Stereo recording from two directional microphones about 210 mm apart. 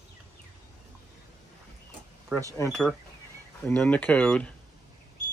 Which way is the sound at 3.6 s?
5° left (ahead or behind).